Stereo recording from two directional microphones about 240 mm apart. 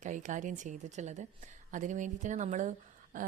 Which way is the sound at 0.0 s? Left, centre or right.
Right.